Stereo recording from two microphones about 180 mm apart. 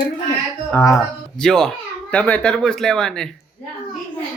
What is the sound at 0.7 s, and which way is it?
Speech, 15° left (ahead or behind).